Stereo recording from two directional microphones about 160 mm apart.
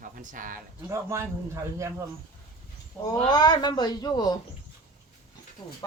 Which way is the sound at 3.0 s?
25° left (ahead or behind).